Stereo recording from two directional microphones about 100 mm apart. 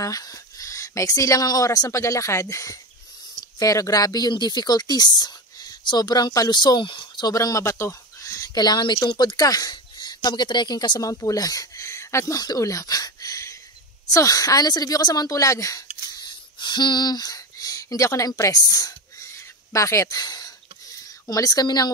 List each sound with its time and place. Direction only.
0.0 s speech: 35° left (ahead or behind)
7.3 s speech: 30° left (ahead or behind)
16.3 s a sound: 50° left (ahead or behind)
21.3 s a woman's voice: 35° left (ahead or behind)